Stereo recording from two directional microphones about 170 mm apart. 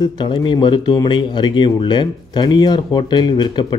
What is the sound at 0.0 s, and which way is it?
Speech, 25° left (ahead or behind).